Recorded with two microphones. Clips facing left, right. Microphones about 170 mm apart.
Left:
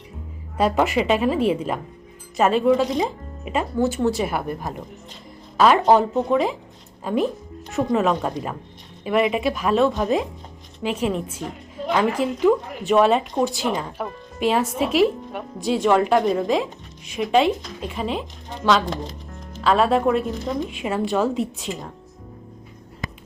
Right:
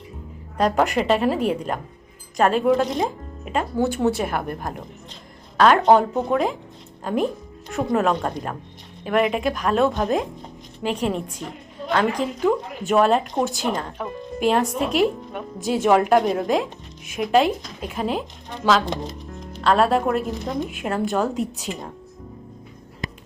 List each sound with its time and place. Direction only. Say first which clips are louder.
0.5 s speech: even; 5° left (ahead or behind)